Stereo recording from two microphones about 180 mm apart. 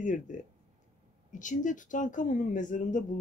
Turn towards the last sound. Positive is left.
turn(degrees=45)  # may be behind; listen again after turning